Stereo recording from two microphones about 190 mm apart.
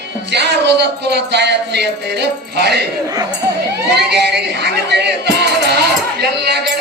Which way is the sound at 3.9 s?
65° right (ahead or behind).